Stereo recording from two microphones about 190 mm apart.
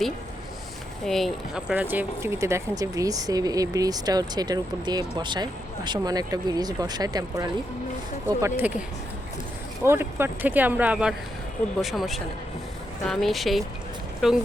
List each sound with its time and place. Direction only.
1.0 s speech: centre (ahead or behind)
9.8 s speech: 10° right (ahead or behind)